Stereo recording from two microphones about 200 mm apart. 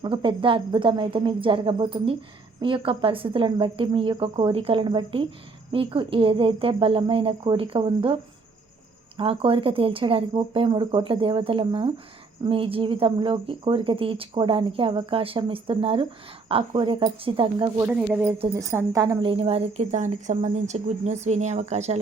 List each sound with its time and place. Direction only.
0.0 s speech: 25° right (ahead or behind)
17.8 s speech: 10° right (ahead or behind); by 21.9 s 35° right (ahead or behind)